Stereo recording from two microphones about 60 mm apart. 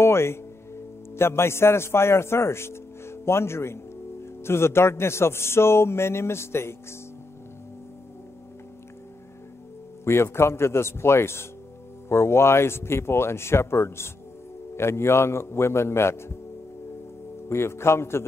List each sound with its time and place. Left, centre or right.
0.0 s a man's voice: left
10.0 s a man's voice: left
17.5 s a man's voice: left